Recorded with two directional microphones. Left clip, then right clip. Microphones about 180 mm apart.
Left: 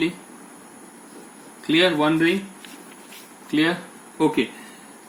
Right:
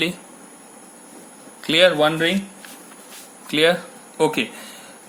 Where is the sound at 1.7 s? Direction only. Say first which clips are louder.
Right 3 dB; 55° right (ahead or behind).